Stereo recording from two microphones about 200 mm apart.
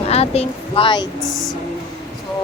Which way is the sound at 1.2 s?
Centre (ahead or behind).